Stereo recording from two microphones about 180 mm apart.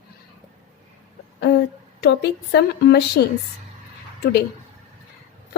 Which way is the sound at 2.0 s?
70° left (ahead or behind).